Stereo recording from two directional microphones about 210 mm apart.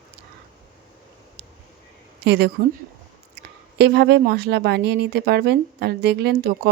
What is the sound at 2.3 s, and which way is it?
Speech, 50° right (ahead or behind).